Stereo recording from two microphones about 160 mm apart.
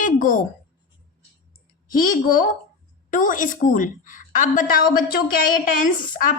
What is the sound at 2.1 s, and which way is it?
A woman's voice, 60° left (ahead or behind).